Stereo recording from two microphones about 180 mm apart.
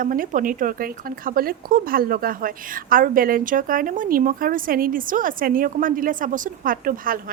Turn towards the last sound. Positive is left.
turn(degrees=-50)  # may be behind; listen again after turning